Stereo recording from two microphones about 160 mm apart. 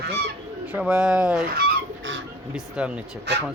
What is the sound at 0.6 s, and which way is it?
Speech, 5° right (ahead or behind).